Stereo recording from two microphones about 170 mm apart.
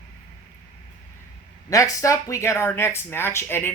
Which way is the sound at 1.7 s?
20° left (ahead or behind).